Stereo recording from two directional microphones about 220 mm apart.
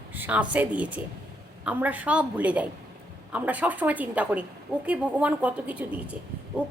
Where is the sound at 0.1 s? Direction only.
5° right (ahead or behind).